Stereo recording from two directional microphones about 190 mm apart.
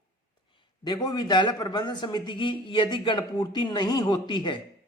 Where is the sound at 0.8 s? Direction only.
20° left (ahead or behind).